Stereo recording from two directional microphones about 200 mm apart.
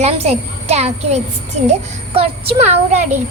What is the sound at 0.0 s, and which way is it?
A child's voice, 30° right (ahead or behind).